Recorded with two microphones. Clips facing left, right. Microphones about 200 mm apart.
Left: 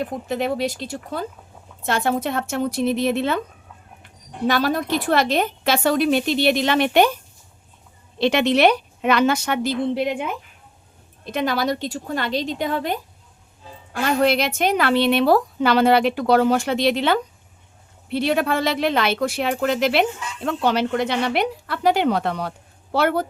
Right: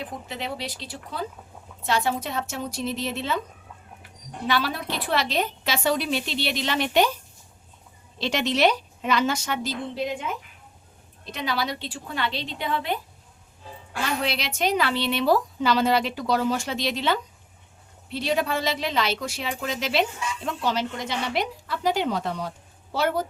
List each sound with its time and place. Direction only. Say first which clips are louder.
0.0 s a woman's voice: left 9 dB; 50° left (ahead or behind)
4.4 s a woman's voice: left 6 dB; 45° left (ahead or behind)
8.2 s a woman's voice: left 6 dB; 60° left (ahead or behind)
11.3 s a woman's voice: left 7 dB; 50° left (ahead or behind)
14.0 s a woman's voice: left 9 dB; 50° left (ahead or behind)